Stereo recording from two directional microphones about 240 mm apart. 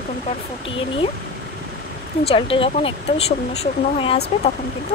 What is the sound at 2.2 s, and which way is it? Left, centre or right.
Speech, left.